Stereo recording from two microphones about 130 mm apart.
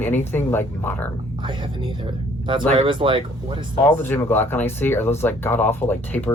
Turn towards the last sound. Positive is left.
turn(degrees=15)  # may be behind; listen again after turning